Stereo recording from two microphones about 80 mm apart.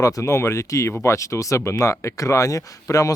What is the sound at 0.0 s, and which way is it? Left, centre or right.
Speech, left.